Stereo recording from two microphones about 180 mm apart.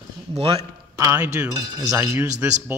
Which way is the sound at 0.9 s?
15° right (ahead or behind).